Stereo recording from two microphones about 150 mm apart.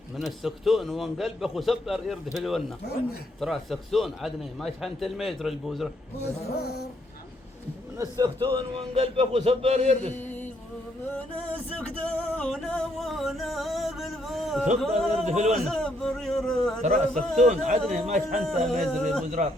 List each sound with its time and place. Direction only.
0.2 s a man's voice: centre (ahead or behind)
6.6 s a sound: 90° left
7.9 s a man's voice: 25° right (ahead or behind); by 10.1 s 45° right (ahead or behind)
10.2 s music: 10° left (ahead or behind)
11.5 s music: 10° left (ahead or behind)
15.1 s a man's voice: 50° right (ahead or behind)
15.7 s a man's voice: 5° left (ahead or behind)
16.8 s a man's voice: 55° right (ahead or behind)
18.4 s a man's voice: 5° left (ahead or behind)
19.4 s speech: 55° right (ahead or behind)